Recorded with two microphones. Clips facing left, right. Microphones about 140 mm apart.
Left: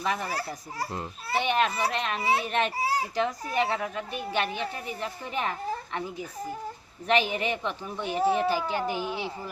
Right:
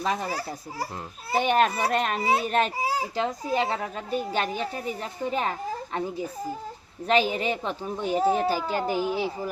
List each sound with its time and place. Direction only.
0.0 s a child's voice: 30° right (ahead or behind)
0.3 s a child's voice: 5° right (ahead or behind)
1.3 s a child's voice: 45° right (ahead or behind)
7.1 s speech: 35° right (ahead or behind)